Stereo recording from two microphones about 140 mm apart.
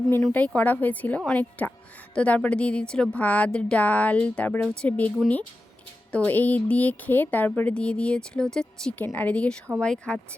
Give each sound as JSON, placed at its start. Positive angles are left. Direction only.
{"t": 0.1, "sound": "speech", "side_deg": 15}